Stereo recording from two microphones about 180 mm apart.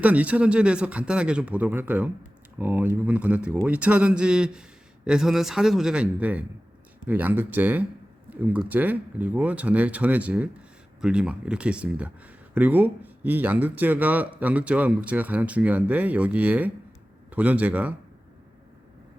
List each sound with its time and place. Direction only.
0.0 s a man's voice: 10° right (ahead or behind)